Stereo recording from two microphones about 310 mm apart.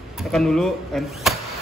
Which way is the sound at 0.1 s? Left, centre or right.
Centre.